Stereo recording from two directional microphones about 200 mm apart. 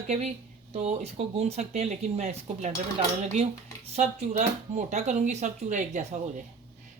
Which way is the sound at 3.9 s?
35° right (ahead or behind).